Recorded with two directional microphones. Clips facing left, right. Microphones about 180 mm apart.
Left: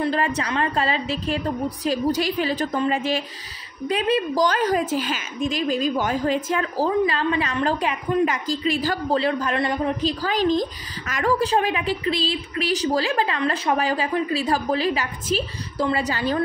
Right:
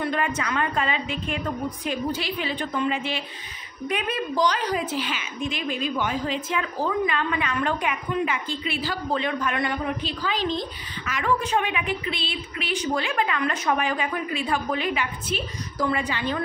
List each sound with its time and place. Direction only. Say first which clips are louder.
0.0 s a sound: left 3 dB; 35° left (ahead or behind)
0.4 s a woman's voice: left 3 dB; 30° left (ahead or behind)
3.9 s a woman's voice: left 6 dB; 30° left (ahead or behind)
4.5 s a woman's voice: left 4 dB; 45° left (ahead or behind)